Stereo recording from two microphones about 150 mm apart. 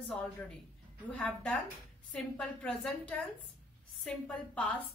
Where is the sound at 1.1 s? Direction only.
5° left (ahead or behind).